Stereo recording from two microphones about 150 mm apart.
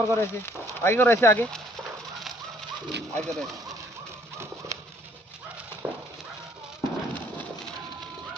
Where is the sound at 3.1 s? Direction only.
5° left (ahead or behind).